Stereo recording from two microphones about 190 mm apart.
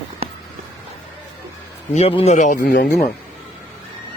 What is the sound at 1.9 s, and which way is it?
Speech, 30° left (ahead or behind).